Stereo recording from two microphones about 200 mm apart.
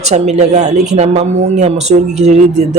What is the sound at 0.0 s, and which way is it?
Speech, 35° right (ahead or behind).